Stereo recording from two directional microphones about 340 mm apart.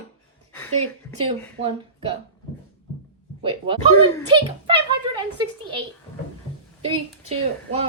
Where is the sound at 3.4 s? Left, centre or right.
Centre.